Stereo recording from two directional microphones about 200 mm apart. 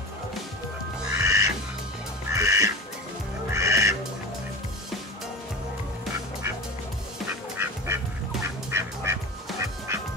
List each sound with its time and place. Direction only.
1.0 s squawk: 15° right (ahead or behind)
2.3 s duck: 15° right (ahead or behind)
7.6 s duck: 15° right (ahead or behind)
8.6 s music: 15° right (ahead or behind)